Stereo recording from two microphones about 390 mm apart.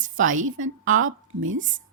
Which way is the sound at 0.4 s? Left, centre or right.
Right.